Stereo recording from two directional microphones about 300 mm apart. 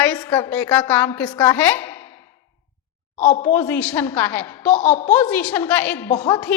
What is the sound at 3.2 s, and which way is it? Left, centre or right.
Speech, left.